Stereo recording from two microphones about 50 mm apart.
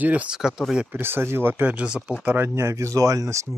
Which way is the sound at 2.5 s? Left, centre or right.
Right.